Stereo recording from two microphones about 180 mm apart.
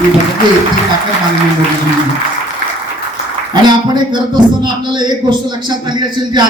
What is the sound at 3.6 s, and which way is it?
A man's voice, 25° right (ahead or behind).